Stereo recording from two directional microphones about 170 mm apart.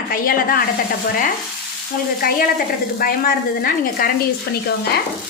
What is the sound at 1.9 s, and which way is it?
A woman's voice, 60° left (ahead or behind).